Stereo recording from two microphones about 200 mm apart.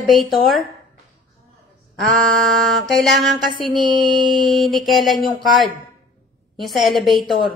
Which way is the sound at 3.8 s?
20° right (ahead or behind).